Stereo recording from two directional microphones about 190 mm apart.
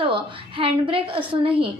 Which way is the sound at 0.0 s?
30° right (ahead or behind).